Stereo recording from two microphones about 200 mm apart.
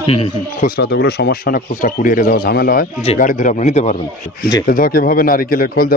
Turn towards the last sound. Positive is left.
turn(degrees=45)  # may be behind; listen again after turning